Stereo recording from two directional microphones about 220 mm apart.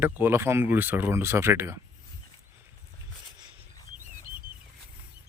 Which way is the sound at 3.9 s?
35° right (ahead or behind).